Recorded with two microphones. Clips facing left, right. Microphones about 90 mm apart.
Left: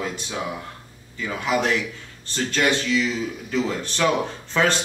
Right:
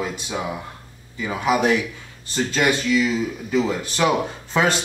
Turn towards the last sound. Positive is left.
turn(degrees=-10)  # may be behind; listen again after turning